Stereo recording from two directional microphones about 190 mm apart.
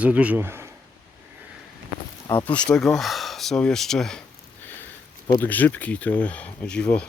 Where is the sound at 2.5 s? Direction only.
5° left (ahead or behind).